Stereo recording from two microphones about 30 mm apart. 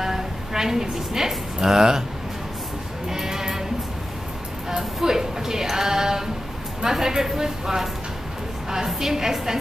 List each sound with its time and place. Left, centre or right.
0.0 s a woman's voice: centre
3.1 s music: centre
4.6 s a woman's voice: centre